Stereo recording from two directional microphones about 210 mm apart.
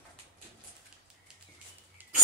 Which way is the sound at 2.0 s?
10° right (ahead or behind).